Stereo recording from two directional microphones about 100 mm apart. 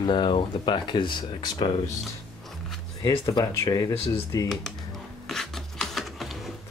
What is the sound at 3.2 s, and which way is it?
Speech, 40° left (ahead or behind).